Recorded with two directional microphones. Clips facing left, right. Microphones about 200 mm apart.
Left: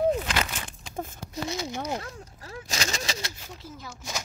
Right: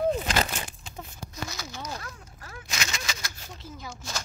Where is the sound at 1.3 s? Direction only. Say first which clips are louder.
Left 7 dB; 25° left (ahead or behind).